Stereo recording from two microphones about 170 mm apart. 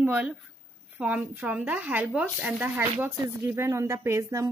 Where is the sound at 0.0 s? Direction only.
5° right (ahead or behind).